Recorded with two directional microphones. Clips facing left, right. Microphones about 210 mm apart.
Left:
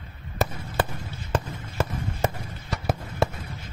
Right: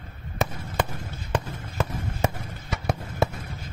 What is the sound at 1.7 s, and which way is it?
Fireworks, 5° left (ahead or behind).